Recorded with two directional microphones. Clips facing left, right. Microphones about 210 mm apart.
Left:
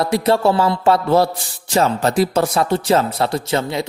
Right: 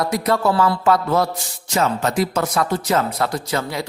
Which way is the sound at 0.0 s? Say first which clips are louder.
Left 3 dB; 30° left (ahead or behind).